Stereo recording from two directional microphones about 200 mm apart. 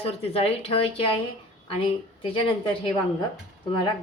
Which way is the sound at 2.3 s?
25° left (ahead or behind).